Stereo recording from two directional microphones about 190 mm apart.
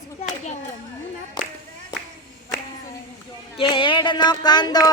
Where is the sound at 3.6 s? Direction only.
25° left (ahead or behind).